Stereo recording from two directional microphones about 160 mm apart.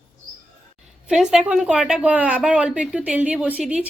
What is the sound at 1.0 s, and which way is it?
A woman's voice, 5° right (ahead or behind).